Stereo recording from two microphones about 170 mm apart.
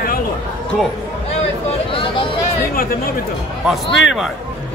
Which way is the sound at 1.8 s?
30° left (ahead or behind).